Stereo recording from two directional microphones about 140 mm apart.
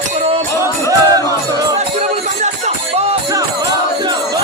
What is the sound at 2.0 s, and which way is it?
Music, 55° right (ahead or behind).